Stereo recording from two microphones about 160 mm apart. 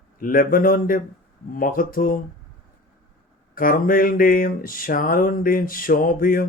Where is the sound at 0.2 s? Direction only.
60° left (ahead or behind).